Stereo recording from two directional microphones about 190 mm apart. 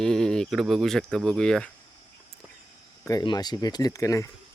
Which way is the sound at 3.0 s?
20° left (ahead or behind).